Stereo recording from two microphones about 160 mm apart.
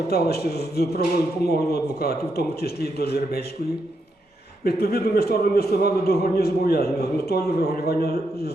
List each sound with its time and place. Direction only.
0.1 s a man's voice: 85° left
4.6 s a man's voice: 80° left